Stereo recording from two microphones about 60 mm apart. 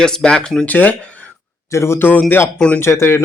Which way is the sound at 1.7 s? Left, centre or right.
Left.